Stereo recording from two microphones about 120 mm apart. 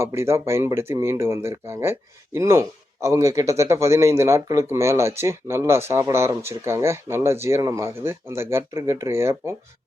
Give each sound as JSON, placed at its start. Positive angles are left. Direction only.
{"t": 0.0, "sound": "speech", "side_deg": -20}